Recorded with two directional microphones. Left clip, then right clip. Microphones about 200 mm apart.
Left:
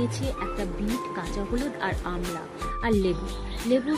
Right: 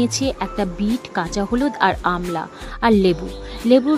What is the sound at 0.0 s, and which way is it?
Speech, 50° right (ahead or behind).